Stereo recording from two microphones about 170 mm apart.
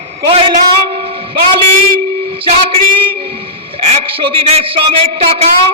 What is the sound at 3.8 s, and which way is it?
A man's voice, 40° right (ahead or behind).